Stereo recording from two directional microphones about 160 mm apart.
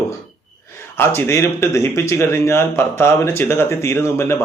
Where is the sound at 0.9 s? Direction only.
15° left (ahead or behind).